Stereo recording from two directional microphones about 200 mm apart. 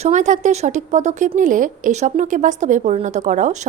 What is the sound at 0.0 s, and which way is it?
A woman's voice, 35° right (ahead or behind).